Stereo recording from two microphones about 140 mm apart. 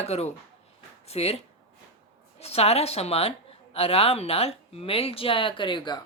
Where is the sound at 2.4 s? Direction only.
45° left (ahead or behind).